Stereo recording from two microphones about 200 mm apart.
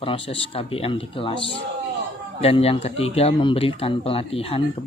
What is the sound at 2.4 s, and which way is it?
Speech, 30° left (ahead or behind).